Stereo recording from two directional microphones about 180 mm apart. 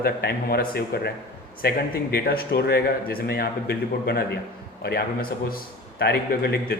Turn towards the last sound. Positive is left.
turn(degrees=65)  # may be behind; listen again after turning